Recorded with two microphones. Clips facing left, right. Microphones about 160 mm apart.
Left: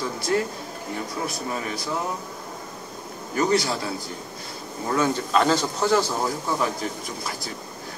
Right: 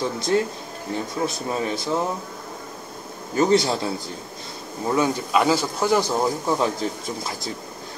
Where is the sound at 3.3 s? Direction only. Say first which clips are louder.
Right 4 dB; 25° right (ahead or behind).